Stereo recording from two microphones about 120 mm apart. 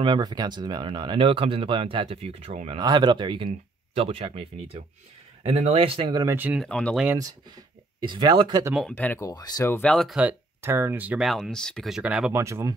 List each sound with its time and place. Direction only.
0.0 s speech: 40° right (ahead or behind); by 2.8 s 55° right (ahead or behind)
2.8 s speech: 40° right (ahead or behind)
6.2 s speech: 15° right (ahead or behind)
6.6 s speech: 10° left (ahead or behind)
7.2 s speech: 35° right (ahead or behind)
8.9 s speech: 15° left (ahead or behind)
9.2 s speech: 35° left (ahead or behind)
9.7 s speech: 15° left (ahead or behind)
10.1 s speech: 15° right (ahead or behind)
11.2 s speech: centre (ahead or behind)
12.0 s speech: 10° right (ahead or behind)
12.4 s speech: 25° right (ahead or behind)